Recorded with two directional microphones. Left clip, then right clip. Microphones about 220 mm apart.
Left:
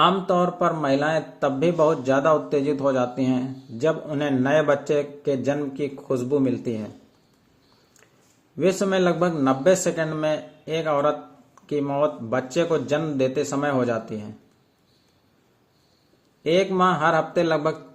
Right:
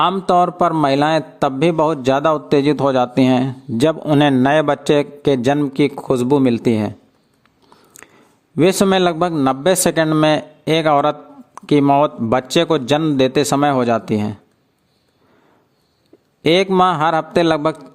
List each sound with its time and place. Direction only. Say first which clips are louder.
0.0 s a man's voice: right 5 dB; 50° right (ahead or behind)
8.0 s a sound: right 16 dB; 55° right (ahead or behind)
8.5 s a man's voice: right 7 dB; 50° right (ahead or behind)
16.4 s a man's voice: right 7 dB; 50° right (ahead or behind)